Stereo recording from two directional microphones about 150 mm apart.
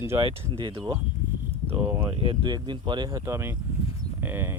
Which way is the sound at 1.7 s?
15° right (ahead or behind).